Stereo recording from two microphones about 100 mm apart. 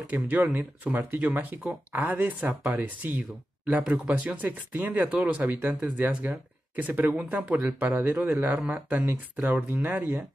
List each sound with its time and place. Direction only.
0.1 s speech: 15° right (ahead or behind)